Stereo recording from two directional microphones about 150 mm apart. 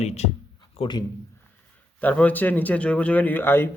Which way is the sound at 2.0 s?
10° left (ahead or behind).